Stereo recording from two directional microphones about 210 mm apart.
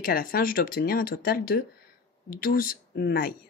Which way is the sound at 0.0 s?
45° left (ahead or behind).